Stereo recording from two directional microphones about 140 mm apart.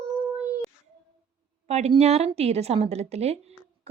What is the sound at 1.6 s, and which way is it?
A woman's voice, 50° right (ahead or behind).